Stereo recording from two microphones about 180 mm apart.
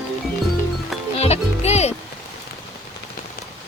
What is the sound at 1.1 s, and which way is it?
Music, 35° left (ahead or behind).